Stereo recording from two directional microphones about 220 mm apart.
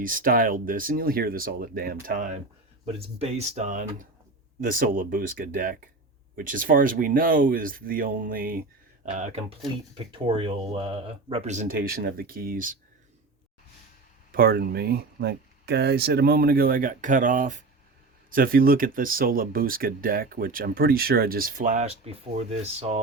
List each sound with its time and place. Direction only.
0.0 s speech: 40° right (ahead or behind)
14.3 s speech: 45° right (ahead or behind)